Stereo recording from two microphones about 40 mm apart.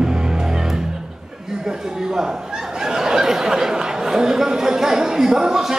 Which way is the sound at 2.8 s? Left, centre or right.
Centre.